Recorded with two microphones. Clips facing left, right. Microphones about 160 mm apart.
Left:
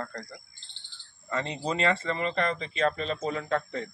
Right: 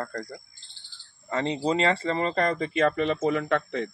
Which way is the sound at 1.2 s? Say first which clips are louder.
Right 5 dB; 25° right (ahead or behind).